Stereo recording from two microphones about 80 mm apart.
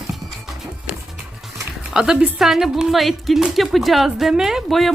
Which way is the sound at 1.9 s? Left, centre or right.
Centre.